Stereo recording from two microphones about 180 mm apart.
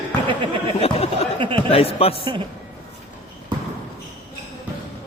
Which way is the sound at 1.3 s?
30° right (ahead or behind).